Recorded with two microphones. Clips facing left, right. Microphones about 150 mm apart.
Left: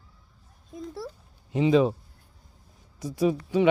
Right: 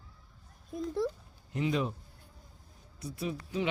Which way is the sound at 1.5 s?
90° left.